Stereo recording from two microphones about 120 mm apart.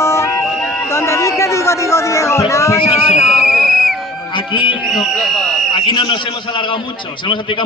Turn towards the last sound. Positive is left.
turn(degrees=40)  # may be behind; listen again after turning